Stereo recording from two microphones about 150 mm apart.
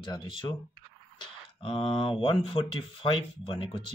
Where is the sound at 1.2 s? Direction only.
35° left (ahead or behind).